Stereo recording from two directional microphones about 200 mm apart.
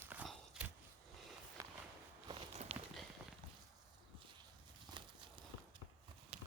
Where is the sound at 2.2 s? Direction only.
30° right (ahead or behind).